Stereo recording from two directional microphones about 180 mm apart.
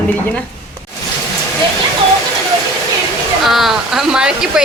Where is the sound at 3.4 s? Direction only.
Centre (ahead or behind).